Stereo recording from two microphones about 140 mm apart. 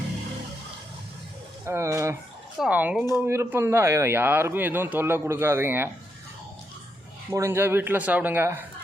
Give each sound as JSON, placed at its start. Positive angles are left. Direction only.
{"t": 1.6, "sound": "speech", "side_deg": -20}
{"t": 7.3, "sound": "speech", "side_deg": -20}